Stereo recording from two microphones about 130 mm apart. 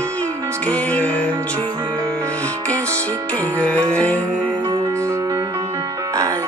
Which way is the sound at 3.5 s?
10° left (ahead or behind).